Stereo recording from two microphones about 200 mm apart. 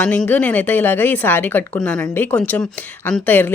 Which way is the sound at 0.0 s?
10° left (ahead or behind).